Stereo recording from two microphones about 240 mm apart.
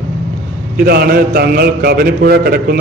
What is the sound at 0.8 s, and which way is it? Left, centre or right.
A man's voice, right.